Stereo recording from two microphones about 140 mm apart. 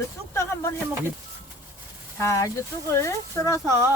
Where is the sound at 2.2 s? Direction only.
20° left (ahead or behind).